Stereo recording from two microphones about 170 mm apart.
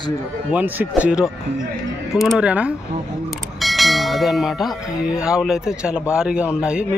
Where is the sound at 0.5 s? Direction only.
10° right (ahead or behind).